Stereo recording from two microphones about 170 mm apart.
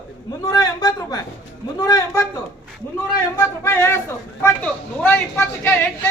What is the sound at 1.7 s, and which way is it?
Speech, 20° left (ahead or behind).